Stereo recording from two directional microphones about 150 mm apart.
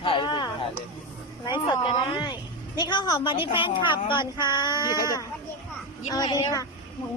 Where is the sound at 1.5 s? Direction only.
30° left (ahead or behind).